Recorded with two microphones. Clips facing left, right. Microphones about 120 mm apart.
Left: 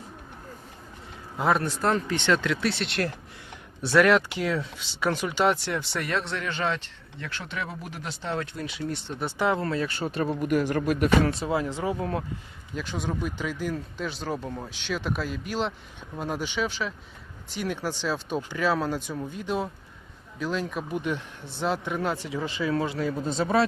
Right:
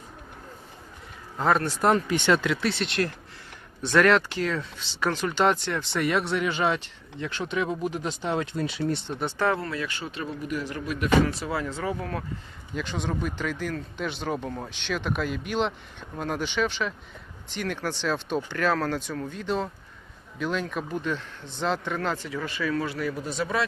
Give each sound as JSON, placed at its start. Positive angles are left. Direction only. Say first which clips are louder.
{"t": 1.8, "sound": "speech", "louder": "right 3 dB", "side_deg": -15}
{"t": 6.1, "sound": "speech", "louder": "right 6 dB", "side_deg": -10}
{"t": 9.6, "sound": "speech", "louder": "left 4 dB", "side_deg": 30}
{"t": 11.3, "sound": "speech", "louder": "left 3 dB", "side_deg": 20}
{"t": 12.7, "sound": "speech", "louder": "right 1 dB", "side_deg": 5}